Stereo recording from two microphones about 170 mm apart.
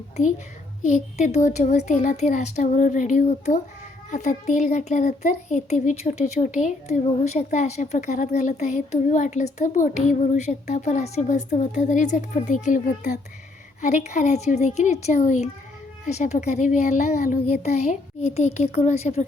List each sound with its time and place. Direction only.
0.8 s a woman's voice: 45° left (ahead or behind)